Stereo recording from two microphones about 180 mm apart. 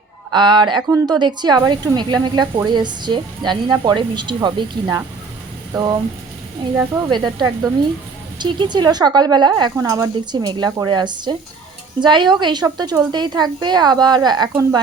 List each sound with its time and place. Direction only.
0.3 s speech: 25° right (ahead or behind)